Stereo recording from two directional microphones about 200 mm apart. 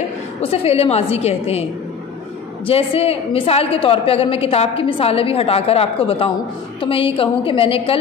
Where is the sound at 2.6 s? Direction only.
30° left (ahead or behind).